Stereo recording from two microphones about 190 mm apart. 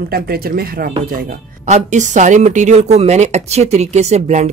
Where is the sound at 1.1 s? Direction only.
45° right (ahead or behind).